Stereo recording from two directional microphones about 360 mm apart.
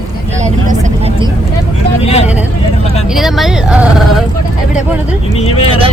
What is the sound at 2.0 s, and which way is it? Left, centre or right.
Vehicle, centre.